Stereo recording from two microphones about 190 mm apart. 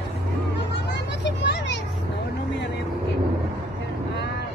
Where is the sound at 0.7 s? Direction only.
65° left (ahead or behind).